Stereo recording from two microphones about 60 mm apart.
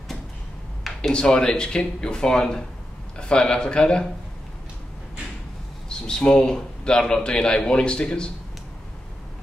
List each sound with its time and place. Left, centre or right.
1.1 s a man's voice: centre
6.0 s a man's voice: centre